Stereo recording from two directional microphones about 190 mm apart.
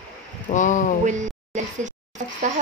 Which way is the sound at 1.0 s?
40° right (ahead or behind).